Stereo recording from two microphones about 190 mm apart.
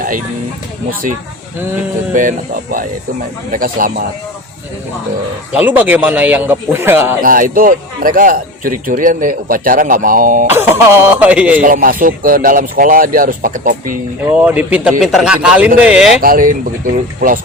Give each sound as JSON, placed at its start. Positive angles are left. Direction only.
{"t": 2.1, "sound": "a man's voice", "side_deg": -45}
{"t": 5.5, "sound": "speech", "side_deg": -10}
{"t": 7.2, "sound": "a man's voice", "side_deg": -45}
{"t": 10.4, "sound": "speech", "side_deg": -10}
{"t": 11.6, "sound": "a man's voice", "side_deg": -50}
{"t": 14.3, "sound": "speech", "side_deg": -10}
{"t": 16.2, "sound": "a man's voice", "side_deg": -50}